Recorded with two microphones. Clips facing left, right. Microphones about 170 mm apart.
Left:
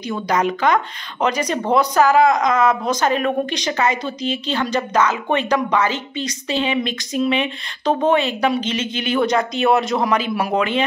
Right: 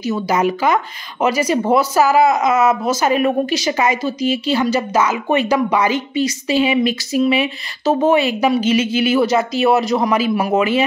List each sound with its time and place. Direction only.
0.0 s speech: 5° right (ahead or behind)